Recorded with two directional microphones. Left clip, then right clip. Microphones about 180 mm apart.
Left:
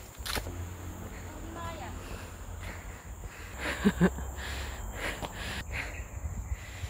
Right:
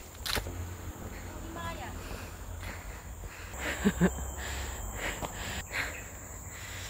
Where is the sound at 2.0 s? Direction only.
10° right (ahead or behind).